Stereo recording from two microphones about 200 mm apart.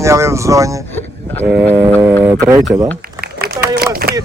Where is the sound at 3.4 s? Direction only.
50° right (ahead or behind).